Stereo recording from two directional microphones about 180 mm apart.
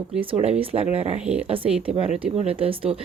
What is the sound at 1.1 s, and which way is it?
Speech, 5° right (ahead or behind).